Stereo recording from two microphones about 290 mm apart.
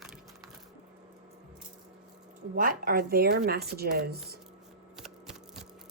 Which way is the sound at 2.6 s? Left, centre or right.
Right.